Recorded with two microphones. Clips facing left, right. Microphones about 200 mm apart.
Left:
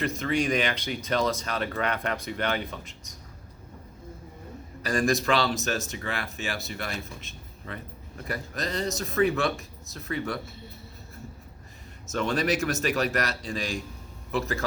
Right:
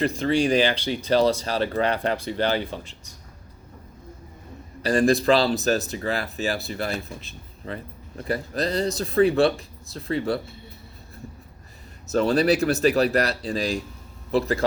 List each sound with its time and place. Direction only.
0.0 s speech: 30° right (ahead or behind)
4.8 s speech: 35° right (ahead or behind)
12.1 s a man's voice: 35° right (ahead or behind)